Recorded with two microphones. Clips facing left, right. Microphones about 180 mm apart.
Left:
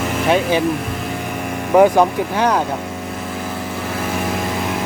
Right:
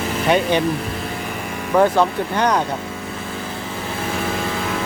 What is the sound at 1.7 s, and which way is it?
Speech, 15° left (ahead or behind).